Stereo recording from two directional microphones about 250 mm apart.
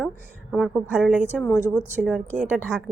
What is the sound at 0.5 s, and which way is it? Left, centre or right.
Speech, centre.